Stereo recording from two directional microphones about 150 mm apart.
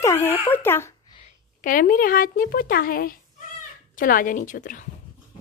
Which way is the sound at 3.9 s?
65° left (ahead or behind).